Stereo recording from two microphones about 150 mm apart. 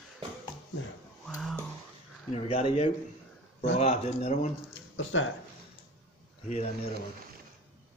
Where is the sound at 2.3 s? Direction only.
40° left (ahead or behind).